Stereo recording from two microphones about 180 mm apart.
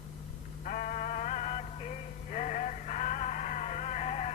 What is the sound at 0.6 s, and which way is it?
Music, 50° left (ahead or behind).